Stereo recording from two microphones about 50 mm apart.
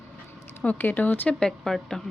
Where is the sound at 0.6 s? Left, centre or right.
Left.